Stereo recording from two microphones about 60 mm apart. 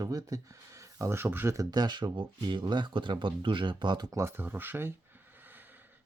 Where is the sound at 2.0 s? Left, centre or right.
Right.